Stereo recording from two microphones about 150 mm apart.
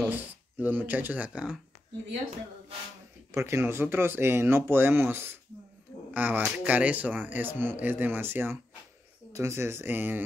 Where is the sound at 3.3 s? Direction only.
15° right (ahead or behind).